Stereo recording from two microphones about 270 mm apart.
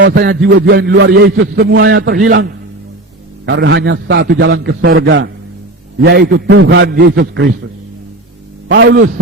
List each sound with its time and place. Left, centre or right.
0.0 s a man's voice: right
8.7 s a man's voice: right